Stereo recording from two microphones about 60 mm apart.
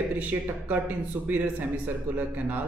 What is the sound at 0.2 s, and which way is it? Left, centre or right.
A man's voice, right.